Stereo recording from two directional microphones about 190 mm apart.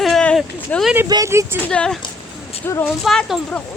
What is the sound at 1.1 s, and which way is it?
Speech, 15° right (ahead or behind).